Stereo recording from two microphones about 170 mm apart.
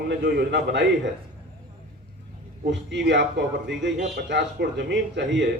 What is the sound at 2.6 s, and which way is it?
A man's voice, 90° right.